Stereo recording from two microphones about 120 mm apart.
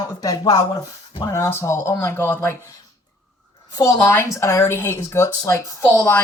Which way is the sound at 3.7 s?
25° left (ahead or behind).